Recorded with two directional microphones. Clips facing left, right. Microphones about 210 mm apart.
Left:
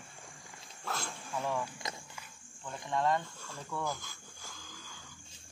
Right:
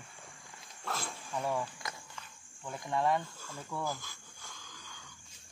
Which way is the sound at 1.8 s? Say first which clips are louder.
Left 2 dB; 20° left (ahead or behind).